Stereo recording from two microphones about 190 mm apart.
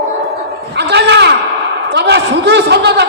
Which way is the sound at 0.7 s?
60° right (ahead or behind).